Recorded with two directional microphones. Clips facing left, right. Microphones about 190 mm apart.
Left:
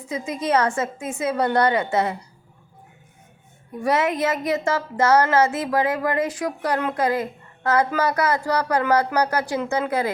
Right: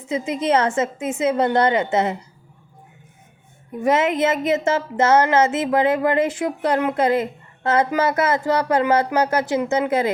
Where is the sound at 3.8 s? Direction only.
20° right (ahead or behind).